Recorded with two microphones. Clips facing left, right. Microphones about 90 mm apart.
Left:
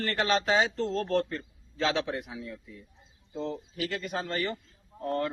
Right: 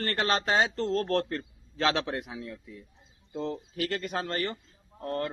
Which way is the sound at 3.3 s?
60° right (ahead or behind).